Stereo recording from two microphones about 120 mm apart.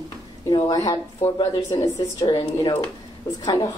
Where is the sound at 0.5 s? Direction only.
35° left (ahead or behind).